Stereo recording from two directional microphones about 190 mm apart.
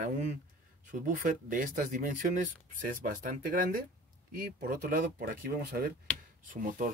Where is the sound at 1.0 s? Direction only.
45° right (ahead or behind).